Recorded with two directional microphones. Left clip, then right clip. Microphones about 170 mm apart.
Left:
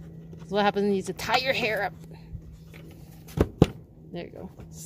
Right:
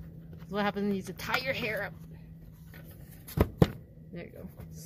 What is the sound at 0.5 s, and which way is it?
Speech, 30° left (ahead or behind).